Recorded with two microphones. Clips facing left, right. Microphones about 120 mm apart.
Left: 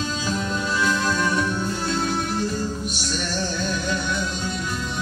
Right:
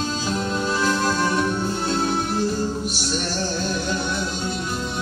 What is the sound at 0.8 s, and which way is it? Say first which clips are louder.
Music: right 1 dB; 35° right (ahead or behind).